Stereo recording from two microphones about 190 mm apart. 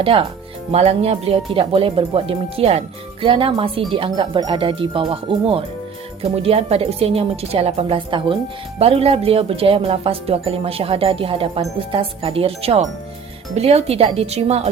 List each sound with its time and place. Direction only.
0.0 s speech: 30° right (ahead or behind)